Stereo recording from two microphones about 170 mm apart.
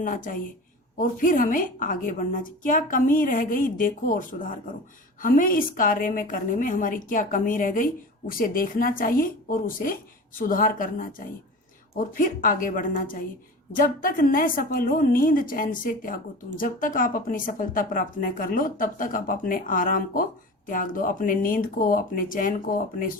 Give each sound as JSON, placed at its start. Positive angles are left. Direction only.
{"t": 0.0, "sound": "a woman's voice", "side_deg": 55}